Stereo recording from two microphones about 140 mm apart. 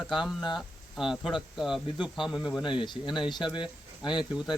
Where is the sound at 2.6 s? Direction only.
35° left (ahead or behind).